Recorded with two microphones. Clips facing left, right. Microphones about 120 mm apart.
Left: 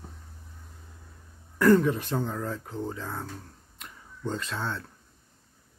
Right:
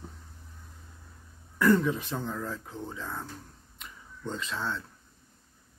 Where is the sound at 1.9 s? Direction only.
Centre (ahead or behind).